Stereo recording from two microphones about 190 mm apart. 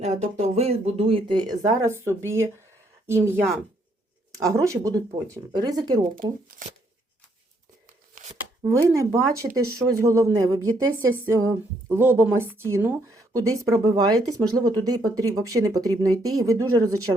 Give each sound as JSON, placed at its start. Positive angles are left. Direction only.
{"t": 0.0, "sound": "speech", "side_deg": -35}
{"t": 8.1, "sound": "chopping", "side_deg": -40}
{"t": 9.0, "sound": "speech", "side_deg": -15}